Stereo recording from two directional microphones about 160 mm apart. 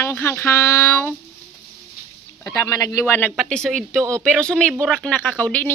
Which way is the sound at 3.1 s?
5° left (ahead or behind).